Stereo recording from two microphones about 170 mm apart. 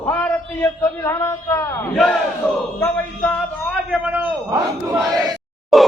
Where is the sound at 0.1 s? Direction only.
10° left (ahead or behind).